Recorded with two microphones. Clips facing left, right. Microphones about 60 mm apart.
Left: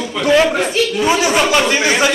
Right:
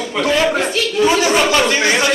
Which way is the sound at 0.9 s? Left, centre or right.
Centre.